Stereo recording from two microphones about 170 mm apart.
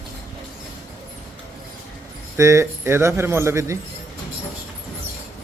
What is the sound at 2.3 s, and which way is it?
Speech, 15° right (ahead or behind).